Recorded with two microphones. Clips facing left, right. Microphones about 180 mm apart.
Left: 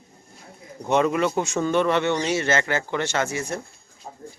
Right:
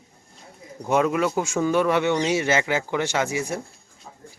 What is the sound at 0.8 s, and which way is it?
Speech, 5° right (ahead or behind).